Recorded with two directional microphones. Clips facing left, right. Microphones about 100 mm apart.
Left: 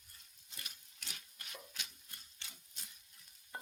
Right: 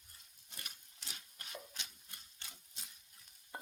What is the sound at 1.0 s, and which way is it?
Rub, 30° right (ahead or behind).